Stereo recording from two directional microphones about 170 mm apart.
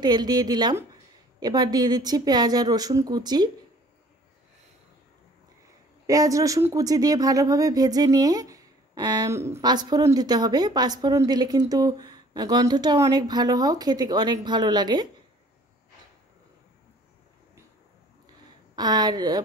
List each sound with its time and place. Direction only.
0.0 s speech: 25° right (ahead or behind)
6.0 s speech: 20° right (ahead or behind)
18.8 s speech: 25° right (ahead or behind)